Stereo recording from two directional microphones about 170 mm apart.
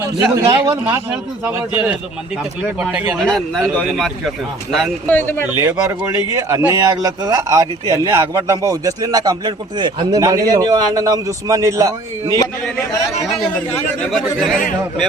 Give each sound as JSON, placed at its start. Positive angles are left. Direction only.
{"t": 0.0, "sound": "speech", "side_deg": -20}
{"t": 2.4, "sound": "speech", "side_deg": -5}
{"t": 5.5, "sound": "speech", "side_deg": -15}
{"t": 13.2, "sound": "speech", "side_deg": 0}